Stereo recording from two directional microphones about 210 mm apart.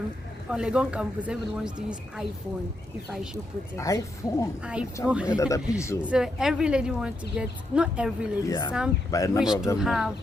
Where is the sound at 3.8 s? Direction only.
15° left (ahead or behind).